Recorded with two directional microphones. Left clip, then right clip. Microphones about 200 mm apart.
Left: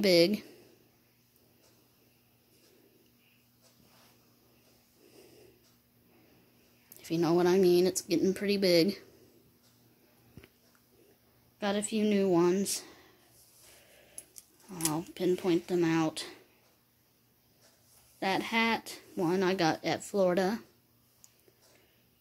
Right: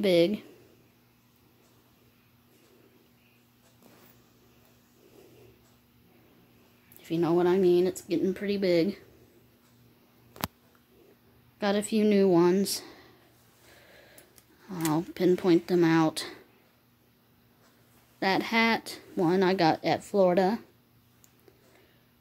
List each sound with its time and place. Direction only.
0.0 s speech: 5° left (ahead or behind)
7.0 s a woman's voice: 5° left (ahead or behind)
11.5 s speech: 15° right (ahead or behind)
18.2 s speech: 15° right (ahead or behind)